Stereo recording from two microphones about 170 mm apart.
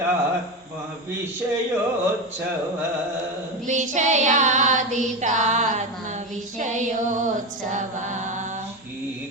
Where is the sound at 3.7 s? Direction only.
45° right (ahead or behind).